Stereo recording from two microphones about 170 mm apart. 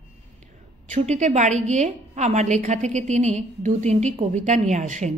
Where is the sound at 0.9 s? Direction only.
40° right (ahead or behind).